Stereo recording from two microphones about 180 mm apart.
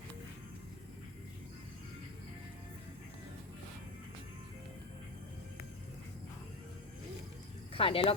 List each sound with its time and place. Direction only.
7.7 s speech: 30° left (ahead or behind)